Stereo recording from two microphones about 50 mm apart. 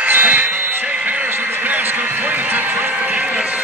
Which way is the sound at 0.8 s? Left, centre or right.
Right.